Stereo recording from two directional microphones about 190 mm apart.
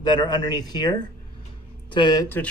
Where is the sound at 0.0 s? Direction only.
20° left (ahead or behind).